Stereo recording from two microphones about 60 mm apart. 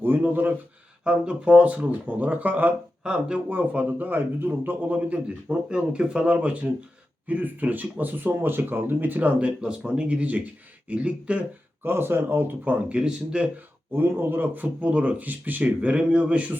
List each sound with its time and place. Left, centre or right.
0.0 s a sound: right
1.0 s speech: centre
3.0 s a man's voice: centre; by 4.8 s right
4.8 s speech: right
11.8 s a man's voice: right
13.0 s speech: centre
13.9 s speech: right